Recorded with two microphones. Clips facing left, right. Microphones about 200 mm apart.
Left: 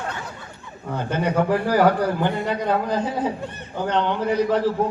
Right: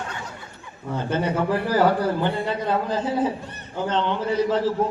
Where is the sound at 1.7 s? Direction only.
15° left (ahead or behind).